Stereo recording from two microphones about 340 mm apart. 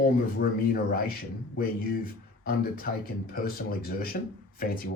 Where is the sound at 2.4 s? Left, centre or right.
Left.